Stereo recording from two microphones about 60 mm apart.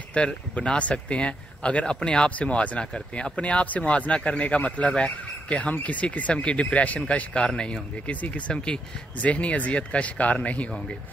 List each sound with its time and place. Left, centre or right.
0.1 s speech: centre